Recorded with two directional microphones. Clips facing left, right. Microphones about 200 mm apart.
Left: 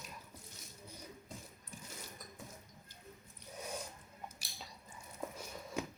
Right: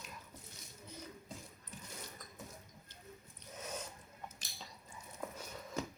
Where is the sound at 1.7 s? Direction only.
10° left (ahead or behind).